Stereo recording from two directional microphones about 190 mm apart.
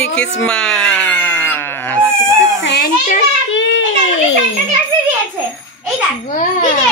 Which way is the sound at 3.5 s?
70° left (ahead or behind).